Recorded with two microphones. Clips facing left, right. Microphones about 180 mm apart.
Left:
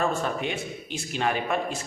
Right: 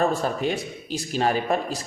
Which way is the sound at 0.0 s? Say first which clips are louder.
Right 4 dB; 35° right (ahead or behind).